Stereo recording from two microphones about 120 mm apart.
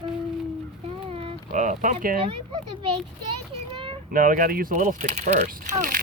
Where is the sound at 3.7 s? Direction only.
45° right (ahead or behind).